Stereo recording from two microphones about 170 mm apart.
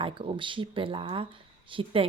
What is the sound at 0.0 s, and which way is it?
Speech, 30° right (ahead or behind).